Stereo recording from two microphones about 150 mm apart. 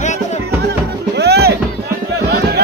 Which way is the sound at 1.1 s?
90° right.